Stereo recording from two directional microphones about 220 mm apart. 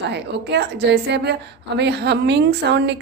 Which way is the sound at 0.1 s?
50° right (ahead or behind).